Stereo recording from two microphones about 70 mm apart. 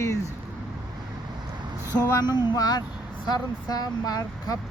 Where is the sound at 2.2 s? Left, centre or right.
Left.